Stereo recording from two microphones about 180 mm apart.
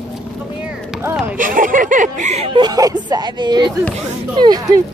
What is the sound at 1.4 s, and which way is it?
Speech, 50° right (ahead or behind).